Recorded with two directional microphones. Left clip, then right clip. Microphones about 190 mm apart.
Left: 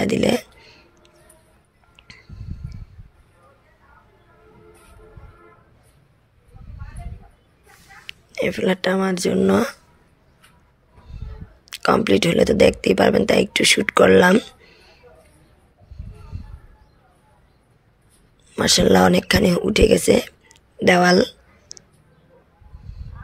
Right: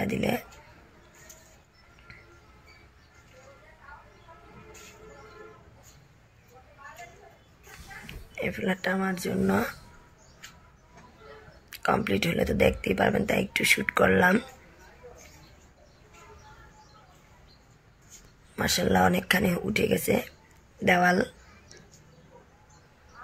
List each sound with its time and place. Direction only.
0.0 s speech: 45° left (ahead or behind)
8.4 s speech: 45° left (ahead or behind)
11.7 s speech: 40° left (ahead or behind)
18.5 s speech: 40° left (ahead or behind)
20.8 s a sound: 40° left (ahead or behind)